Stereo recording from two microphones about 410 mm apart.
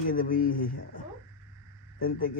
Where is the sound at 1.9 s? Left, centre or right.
Left.